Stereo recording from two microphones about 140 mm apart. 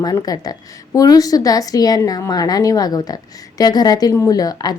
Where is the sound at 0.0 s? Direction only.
25° left (ahead or behind).